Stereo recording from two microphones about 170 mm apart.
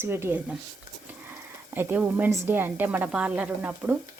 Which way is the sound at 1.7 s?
10° right (ahead or behind).